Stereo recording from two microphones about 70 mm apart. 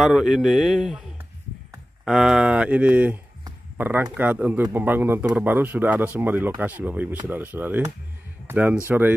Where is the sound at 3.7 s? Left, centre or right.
Right.